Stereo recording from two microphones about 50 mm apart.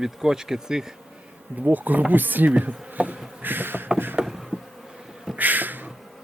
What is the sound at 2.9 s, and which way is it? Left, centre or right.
Insect, right.